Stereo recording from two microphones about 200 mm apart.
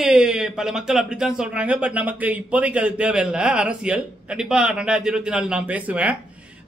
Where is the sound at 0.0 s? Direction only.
5° right (ahead or behind).